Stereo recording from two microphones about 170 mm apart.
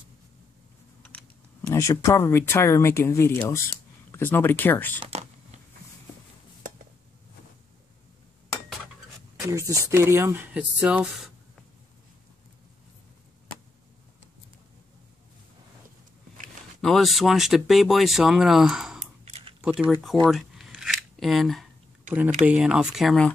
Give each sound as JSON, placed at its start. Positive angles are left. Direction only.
{"t": 1.7, "sound": "speech", "side_deg": 15}
{"t": 5.0, "sound": "a sound", "side_deg": -40}
{"t": 9.4, "sound": "speech", "side_deg": -20}
{"t": 16.8, "sound": "speech", "side_deg": 0}
{"t": 19.2, "sound": "keys jangling", "side_deg": -35}
{"t": 19.6, "sound": "speech", "side_deg": -5}
{"t": 20.2, "sound": "a sound", "side_deg": 0}
{"t": 22.5, "sound": "speech", "side_deg": -5}